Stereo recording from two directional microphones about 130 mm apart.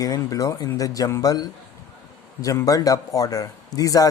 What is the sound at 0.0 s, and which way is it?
A man's voice, 30° left (ahead or behind).